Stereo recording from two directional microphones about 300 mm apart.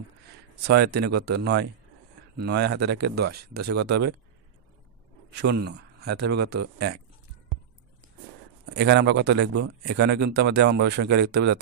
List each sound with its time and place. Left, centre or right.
0.7 s speech: right
5.3 s speech: right
8.7 s speech: right